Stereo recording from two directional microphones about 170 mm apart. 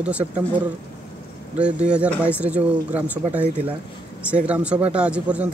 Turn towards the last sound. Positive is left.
turn(degrees=-5)  # may be behind; listen again after turning